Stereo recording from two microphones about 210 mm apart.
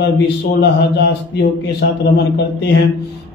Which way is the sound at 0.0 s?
55° left (ahead or behind).